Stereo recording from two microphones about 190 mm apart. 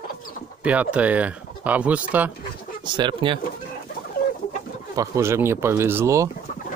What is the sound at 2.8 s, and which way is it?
Speech, 25° right (ahead or behind).